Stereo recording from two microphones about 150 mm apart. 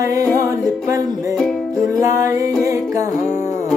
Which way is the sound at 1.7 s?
20° right (ahead or behind).